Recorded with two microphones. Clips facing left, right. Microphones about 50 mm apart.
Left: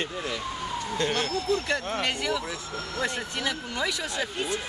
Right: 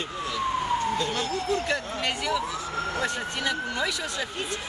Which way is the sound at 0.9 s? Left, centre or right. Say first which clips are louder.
Left 1 dB; left.